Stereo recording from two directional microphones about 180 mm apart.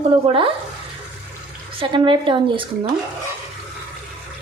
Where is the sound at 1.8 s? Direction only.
30° right (ahead or behind).